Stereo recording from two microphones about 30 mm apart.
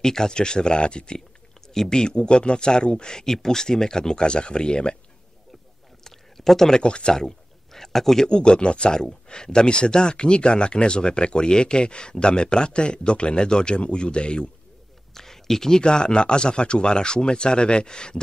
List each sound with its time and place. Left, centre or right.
0.0 s speech: centre
6.0 s a sound: centre
6.8 s speech: left
7.7 s speech: centre
8.3 s speech: left
15.1 s a sound: centre
15.8 s speech: left